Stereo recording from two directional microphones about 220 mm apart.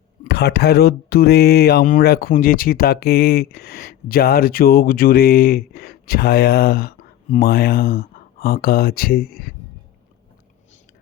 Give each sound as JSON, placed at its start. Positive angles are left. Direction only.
{"t": 0.3, "sound": "speech", "side_deg": 45}